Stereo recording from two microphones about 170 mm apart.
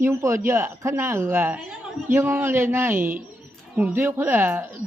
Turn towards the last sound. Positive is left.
turn(degrees=-15)  # may be behind; listen again after turning